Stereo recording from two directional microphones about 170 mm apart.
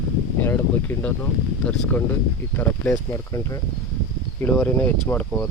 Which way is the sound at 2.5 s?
10° left (ahead or behind).